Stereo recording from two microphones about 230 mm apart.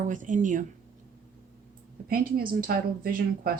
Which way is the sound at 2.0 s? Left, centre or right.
Right.